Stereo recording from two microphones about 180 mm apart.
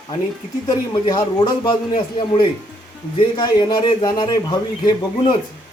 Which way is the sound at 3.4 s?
25° left (ahead or behind).